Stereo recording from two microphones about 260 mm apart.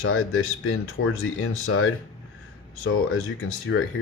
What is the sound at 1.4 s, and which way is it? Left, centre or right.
Speech, left.